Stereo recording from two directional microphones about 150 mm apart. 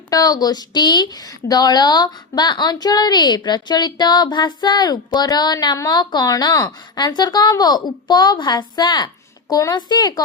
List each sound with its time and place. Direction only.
0.1 s a woman's voice: 25° left (ahead or behind)